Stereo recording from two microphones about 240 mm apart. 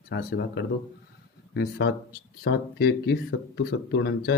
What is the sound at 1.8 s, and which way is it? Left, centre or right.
Speech, left.